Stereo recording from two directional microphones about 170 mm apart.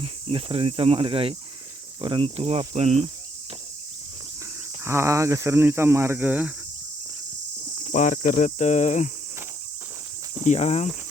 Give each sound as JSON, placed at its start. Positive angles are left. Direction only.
{"t": 0.0, "sound": "speech", "side_deg": -30}
{"t": 4.8, "sound": "speech", "side_deg": -15}
{"t": 7.9, "sound": "cricket", "side_deg": 45}
{"t": 10.4, "sound": "speech", "side_deg": 40}